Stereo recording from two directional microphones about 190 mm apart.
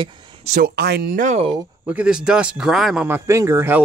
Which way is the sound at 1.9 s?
5° right (ahead or behind).